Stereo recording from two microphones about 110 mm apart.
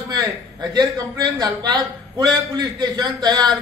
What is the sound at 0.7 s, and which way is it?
A man's voice, 30° right (ahead or behind).